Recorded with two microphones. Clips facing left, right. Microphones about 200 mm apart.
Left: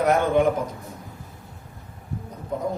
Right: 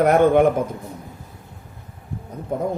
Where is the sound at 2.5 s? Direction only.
55° right (ahead or behind).